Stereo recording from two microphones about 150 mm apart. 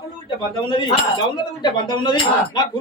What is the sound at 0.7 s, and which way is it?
Speech, 35° left (ahead or behind).